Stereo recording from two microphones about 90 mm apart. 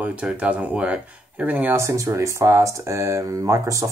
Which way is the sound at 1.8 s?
35° right (ahead or behind).